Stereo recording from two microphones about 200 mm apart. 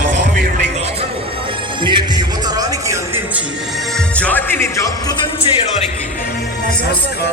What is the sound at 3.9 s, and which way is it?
Music, 5° left (ahead or behind).